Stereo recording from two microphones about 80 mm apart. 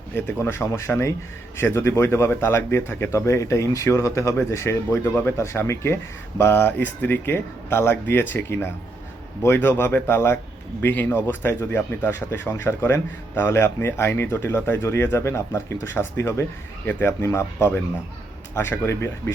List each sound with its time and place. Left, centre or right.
0.1 s speech: left